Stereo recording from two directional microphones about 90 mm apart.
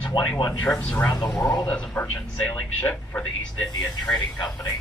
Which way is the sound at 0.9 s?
30° left (ahead or behind).